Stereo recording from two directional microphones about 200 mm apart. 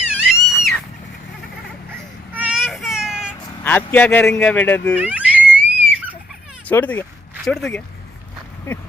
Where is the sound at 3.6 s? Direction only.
10° left (ahead or behind).